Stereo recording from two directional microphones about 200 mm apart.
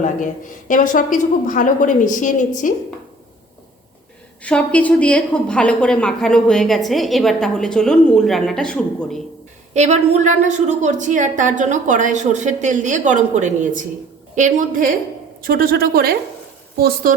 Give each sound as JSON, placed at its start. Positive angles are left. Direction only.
{"t": 0.0, "sound": "a woman's voice", "side_deg": 40}
{"t": 4.4, "sound": "a woman's voice", "side_deg": 5}
{"t": 9.7, "sound": "a woman's voice", "side_deg": -35}